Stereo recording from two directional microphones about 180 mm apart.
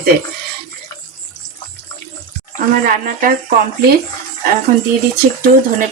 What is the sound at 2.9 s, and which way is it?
Speech, 50° right (ahead or behind).